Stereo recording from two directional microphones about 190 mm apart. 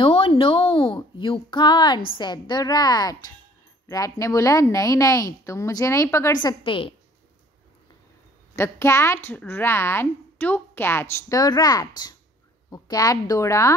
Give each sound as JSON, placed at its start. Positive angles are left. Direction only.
{"t": 0.0, "sound": "a sound", "side_deg": 25}
{"t": 2.1, "sound": "a woman's voice", "side_deg": 25}
{"t": 8.5, "sound": "speech", "side_deg": 15}